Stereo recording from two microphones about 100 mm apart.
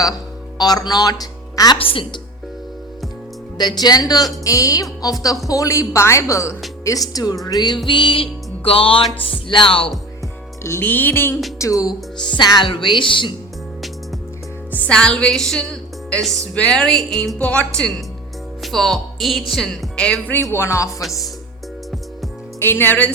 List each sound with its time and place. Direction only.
0.6 s a woman's voice: 40° left (ahead or behind)
1.8 s music: 65° left (ahead or behind)
3.6 s speech: 45° left (ahead or behind)
7.9 s music: 55° left (ahead or behind)
10.6 s music: 25° left (ahead or behind)
11.6 s speech: 35° left (ahead or behind); by 13.3 s 55° left (ahead or behind)
14.7 s a woman's voice: 10° left (ahead or behind)
20.5 s music: 25° left (ahead or behind)
22.6 s music: 20° left (ahead or behind)